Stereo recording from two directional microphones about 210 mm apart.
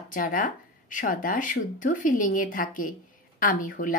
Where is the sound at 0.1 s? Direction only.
40° left (ahead or behind).